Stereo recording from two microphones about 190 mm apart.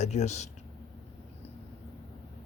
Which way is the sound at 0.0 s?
35° left (ahead or behind).